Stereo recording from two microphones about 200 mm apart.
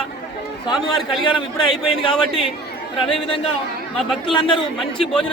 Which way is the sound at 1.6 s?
25° left (ahead or behind).